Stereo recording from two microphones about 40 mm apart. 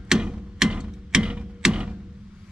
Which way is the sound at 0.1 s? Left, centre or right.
Centre.